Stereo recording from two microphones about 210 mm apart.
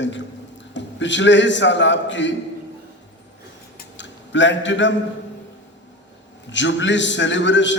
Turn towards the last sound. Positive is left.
turn(degrees=60)  # may be behind; listen again after turning